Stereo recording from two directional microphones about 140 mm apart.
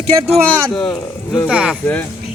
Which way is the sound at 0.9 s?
20° left (ahead or behind).